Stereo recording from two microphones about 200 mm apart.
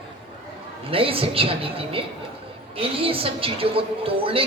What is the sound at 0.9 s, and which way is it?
Music, 25° right (ahead or behind).